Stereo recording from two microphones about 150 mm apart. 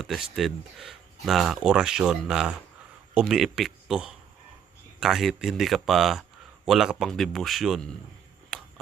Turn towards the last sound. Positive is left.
turn(degrees=0)  # may be behind; listen again after turning